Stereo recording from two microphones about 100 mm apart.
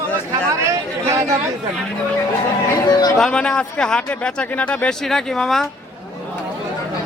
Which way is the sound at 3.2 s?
10° left (ahead or behind).